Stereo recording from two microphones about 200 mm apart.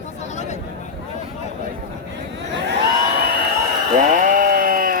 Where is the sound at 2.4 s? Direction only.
60° right (ahead or behind).